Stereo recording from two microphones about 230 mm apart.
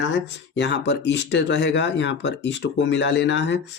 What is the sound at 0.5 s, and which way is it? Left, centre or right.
Speech, left.